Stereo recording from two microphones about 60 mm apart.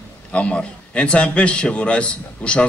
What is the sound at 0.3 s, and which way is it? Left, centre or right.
A man's voice, centre.